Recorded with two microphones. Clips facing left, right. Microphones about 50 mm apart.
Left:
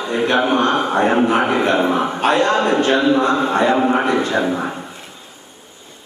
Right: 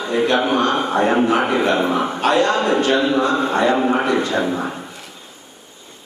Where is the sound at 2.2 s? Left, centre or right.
Left.